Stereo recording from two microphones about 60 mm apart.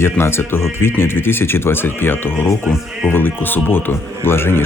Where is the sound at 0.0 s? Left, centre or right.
Left.